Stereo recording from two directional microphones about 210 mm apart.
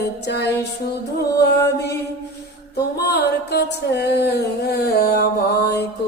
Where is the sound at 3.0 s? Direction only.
50° left (ahead or behind).